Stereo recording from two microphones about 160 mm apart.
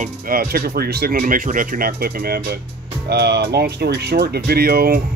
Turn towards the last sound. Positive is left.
turn(degrees=-75)  # may be behind; listen again after turning